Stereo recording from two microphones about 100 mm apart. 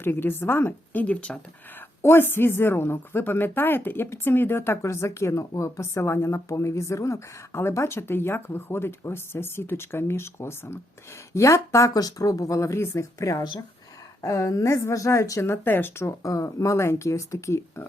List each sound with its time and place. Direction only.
0.0 s speech: 20° left (ahead or behind)
2.0 s speech: 25° left (ahead or behind)